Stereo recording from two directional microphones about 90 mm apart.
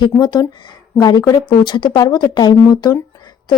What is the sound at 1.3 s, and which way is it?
Speech, 60° left (ahead or behind).